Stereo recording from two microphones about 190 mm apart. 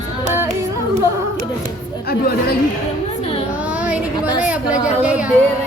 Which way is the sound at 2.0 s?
55° left (ahead or behind).